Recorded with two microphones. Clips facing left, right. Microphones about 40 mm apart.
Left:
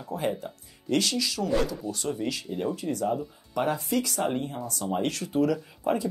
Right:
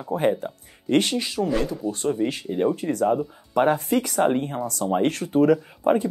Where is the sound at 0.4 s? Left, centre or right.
Right.